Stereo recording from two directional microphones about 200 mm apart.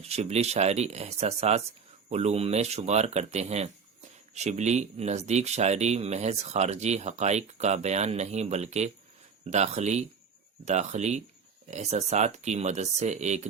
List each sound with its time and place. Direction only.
0.1 s speech: 30° right (ahead or behind)